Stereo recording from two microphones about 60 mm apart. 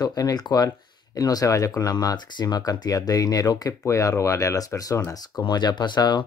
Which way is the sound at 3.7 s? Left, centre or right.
Left.